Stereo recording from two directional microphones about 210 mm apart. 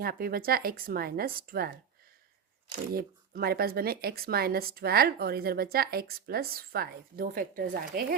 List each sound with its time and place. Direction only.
0.0 s speech: 45° right (ahead or behind)
2.9 s speech: 45° right (ahead or behind)